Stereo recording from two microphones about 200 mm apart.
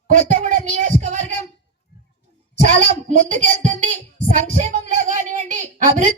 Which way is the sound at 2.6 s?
40° right (ahead or behind).